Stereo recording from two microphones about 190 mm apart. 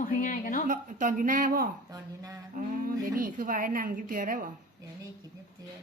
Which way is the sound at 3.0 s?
45° right (ahead or behind).